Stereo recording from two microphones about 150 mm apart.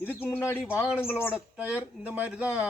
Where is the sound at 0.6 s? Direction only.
5° right (ahead or behind).